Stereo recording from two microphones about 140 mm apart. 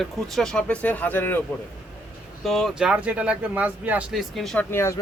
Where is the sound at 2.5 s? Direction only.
Centre (ahead or behind).